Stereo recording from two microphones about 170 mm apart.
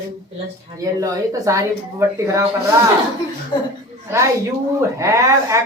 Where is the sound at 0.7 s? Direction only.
20° right (ahead or behind).